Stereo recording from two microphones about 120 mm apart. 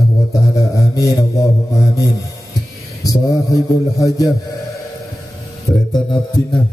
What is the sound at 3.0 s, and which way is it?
A man's voice, 30° left (ahead or behind).